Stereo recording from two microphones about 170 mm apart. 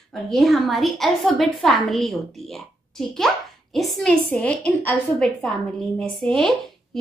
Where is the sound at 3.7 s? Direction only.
Centre (ahead or behind).